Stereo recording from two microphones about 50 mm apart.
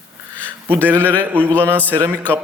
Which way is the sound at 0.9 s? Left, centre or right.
Left.